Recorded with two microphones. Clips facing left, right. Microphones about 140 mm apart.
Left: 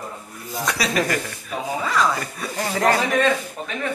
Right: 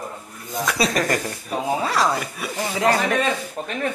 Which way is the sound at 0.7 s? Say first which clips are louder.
Right 1 dB; 40° right (ahead or behind).